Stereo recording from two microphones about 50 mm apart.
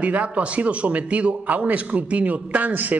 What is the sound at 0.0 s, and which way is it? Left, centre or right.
A man's voice, right.